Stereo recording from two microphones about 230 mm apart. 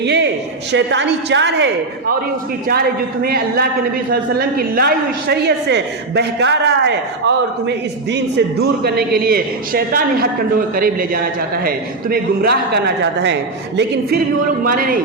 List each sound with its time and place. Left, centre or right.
0.0 s a sound: right
0.7 s a woman's voice: right
3.2 s a woman's voice: right